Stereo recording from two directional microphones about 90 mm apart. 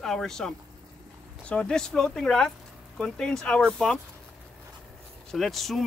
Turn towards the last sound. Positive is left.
turn(degrees=0)  # may be behind; listen again after turning